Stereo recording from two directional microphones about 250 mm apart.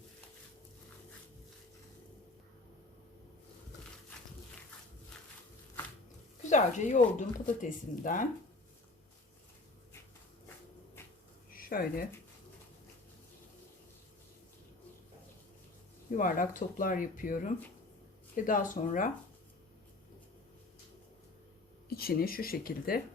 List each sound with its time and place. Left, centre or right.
6.4 s speech: left
11.5 s speech: left
16.1 s speech: left
21.8 s speech: left